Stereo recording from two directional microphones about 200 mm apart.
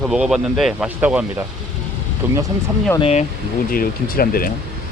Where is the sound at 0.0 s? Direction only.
Centre (ahead or behind).